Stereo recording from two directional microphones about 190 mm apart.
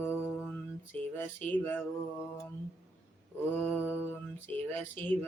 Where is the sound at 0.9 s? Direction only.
10° left (ahead or behind).